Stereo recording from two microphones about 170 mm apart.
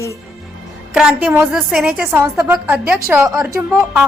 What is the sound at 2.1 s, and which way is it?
A woman's voice, 15° right (ahead or behind).